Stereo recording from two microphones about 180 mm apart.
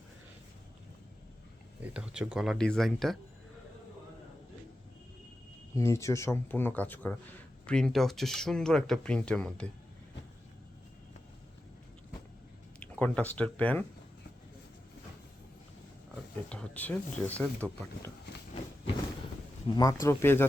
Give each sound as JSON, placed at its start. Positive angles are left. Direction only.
{"t": 1.8, "sound": "speech", "side_deg": -5}
{"t": 5.7, "sound": "speech", "side_deg": 15}
{"t": 12.8, "sound": "speech", "side_deg": 5}
{"t": 16.5, "sound": "speech", "side_deg": 5}
{"t": 19.6, "sound": "speech", "side_deg": 20}